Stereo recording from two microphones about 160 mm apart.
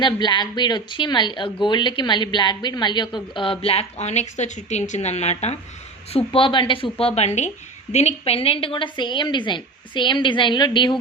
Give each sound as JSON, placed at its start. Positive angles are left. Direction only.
{"t": 0.0, "sound": "a woman's voice", "side_deg": 30}
{"t": 6.1, "sound": "a woman's voice", "side_deg": 35}
{"t": 7.2, "sound": "a woman's voice", "side_deg": 45}